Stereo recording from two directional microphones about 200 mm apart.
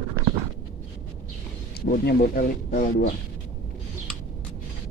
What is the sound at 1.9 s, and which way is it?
Speech, 50° left (ahead or behind).